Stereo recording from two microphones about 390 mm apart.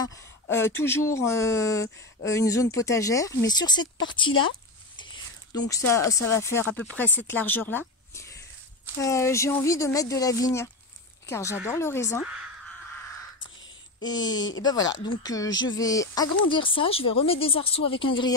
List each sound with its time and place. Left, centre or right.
0.0 s speech: centre
4.3 s speech: left
5.8 s speech: left
6.0 s speech: centre
14.0 s speech: centre